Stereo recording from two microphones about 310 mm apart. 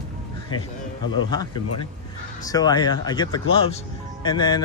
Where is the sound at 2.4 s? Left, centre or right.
Centre.